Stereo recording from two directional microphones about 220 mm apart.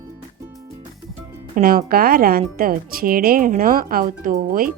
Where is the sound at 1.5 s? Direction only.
40° right (ahead or behind).